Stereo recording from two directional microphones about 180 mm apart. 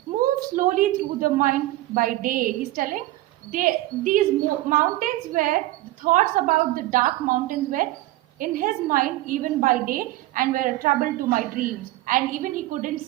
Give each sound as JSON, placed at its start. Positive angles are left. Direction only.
{"t": 0.3, "sound": "a woman's voice", "side_deg": -50}